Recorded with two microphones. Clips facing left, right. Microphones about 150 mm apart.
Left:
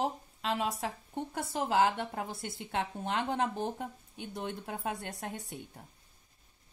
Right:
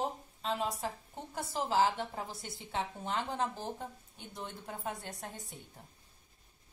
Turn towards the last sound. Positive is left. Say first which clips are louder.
# left 4 dB
turn(degrees=65)  # may be behind; listen again after turning